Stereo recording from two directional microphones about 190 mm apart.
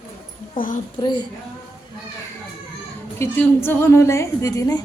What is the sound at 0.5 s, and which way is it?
Speech, 45° left (ahead or behind).